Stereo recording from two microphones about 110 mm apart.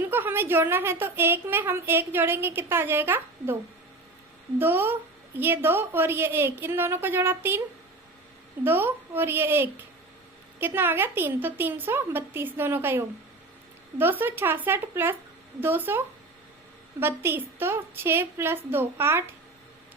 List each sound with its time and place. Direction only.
0.0 s a woman's voice: 20° right (ahead or behind)
8.6 s a woman's voice: 20° right (ahead or behind)
17.0 s a woman's voice: 20° right (ahead or behind)